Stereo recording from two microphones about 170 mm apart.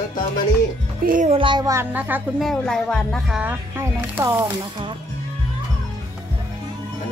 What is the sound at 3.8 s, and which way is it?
Speech, 15° right (ahead or behind).